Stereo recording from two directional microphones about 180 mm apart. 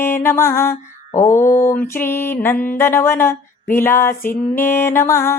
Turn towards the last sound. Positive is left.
turn(degrees=15)  # may be behind; listen again after turning